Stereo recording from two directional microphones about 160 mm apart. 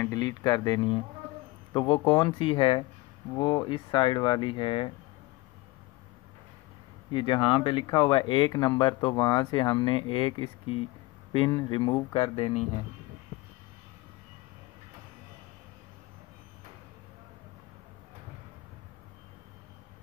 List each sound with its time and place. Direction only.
0.0 s speech: 25° left (ahead or behind)
7.1 s speech: 30° left (ahead or behind)